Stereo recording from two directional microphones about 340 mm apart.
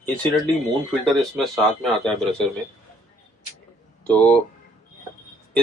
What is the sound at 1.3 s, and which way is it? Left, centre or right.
Speech, centre.